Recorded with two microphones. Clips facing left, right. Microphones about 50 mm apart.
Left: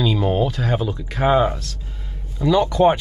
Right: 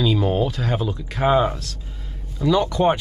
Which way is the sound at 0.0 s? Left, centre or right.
Centre.